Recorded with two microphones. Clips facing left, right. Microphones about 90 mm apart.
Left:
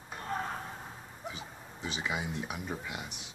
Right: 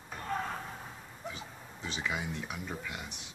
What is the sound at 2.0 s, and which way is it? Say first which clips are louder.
Speech: left 1 dB; 15° left (ahead or behind).